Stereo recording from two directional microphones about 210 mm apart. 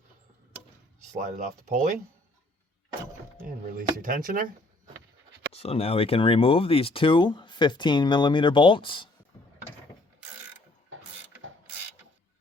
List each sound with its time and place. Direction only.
1.1 s speech: 35° right (ahead or behind)
4.0 s speech: 40° right (ahead or behind)
5.5 s speech: 30° left (ahead or behind)
10.9 s mechanisms: 75° right (ahead or behind)